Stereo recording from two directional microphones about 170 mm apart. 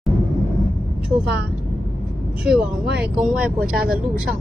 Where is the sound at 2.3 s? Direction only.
5° right (ahead or behind).